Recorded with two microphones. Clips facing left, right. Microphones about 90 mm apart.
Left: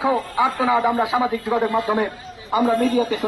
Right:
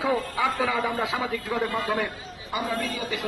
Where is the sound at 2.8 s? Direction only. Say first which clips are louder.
Left 11 dB; 45° left (ahead or behind).